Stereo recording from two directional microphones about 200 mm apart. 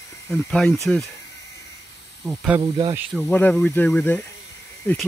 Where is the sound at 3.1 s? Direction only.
5° left (ahead or behind).